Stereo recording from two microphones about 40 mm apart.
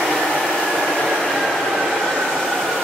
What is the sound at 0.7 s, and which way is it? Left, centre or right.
Train, centre.